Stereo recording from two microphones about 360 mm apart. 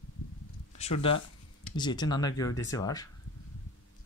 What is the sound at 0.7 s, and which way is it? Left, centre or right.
Speech, centre.